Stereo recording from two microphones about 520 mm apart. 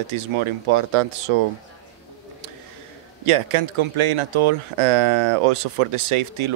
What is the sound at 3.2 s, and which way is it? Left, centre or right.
Speech, right.